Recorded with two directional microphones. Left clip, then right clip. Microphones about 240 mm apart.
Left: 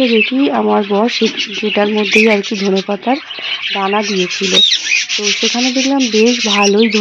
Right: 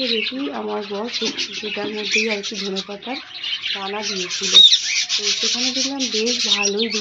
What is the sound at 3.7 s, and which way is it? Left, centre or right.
Speech, left.